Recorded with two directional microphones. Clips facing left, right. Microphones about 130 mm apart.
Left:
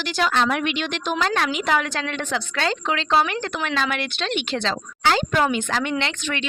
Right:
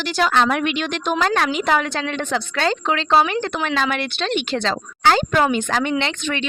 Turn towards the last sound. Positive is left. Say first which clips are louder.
# right 3 dB
turn(degrees=-25)  # may be behind; listen again after turning